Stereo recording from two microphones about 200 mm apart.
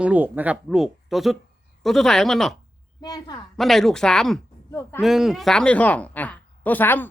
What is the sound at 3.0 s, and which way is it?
Speech, 20° left (ahead or behind).